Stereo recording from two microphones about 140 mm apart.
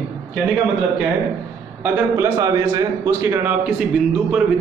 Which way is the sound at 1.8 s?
15° right (ahead or behind).